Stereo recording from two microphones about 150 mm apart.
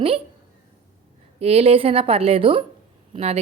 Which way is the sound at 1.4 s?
40° right (ahead or behind).